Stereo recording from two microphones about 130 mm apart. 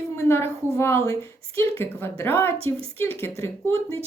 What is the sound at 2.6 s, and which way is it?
Speech, 45° right (ahead or behind).